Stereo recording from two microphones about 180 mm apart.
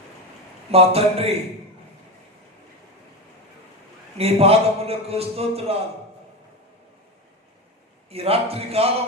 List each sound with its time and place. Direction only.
0.7 s a man's voice: 35° right (ahead or behind)
4.2 s a man's voice: 35° right (ahead or behind)
8.1 s a man's voice: 35° right (ahead or behind)